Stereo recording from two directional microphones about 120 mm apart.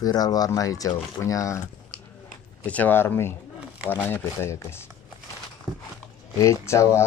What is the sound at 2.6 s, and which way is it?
Speech, 15° left (ahead or behind).